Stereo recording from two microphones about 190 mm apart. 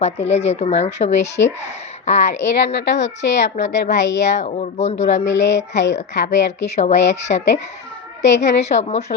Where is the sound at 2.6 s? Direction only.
65° left (ahead or behind).